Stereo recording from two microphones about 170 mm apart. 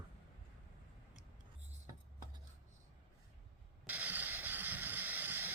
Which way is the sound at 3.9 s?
10° right (ahead or behind).